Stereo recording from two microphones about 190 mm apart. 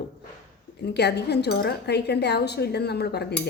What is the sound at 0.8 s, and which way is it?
A woman's voice, 60° left (ahead or behind).